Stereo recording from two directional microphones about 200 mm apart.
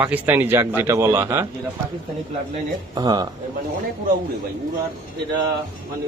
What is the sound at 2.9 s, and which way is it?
Speech, 20° right (ahead or behind).